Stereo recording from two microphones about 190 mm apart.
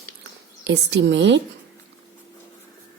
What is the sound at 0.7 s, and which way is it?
Speech, 65° right (ahead or behind).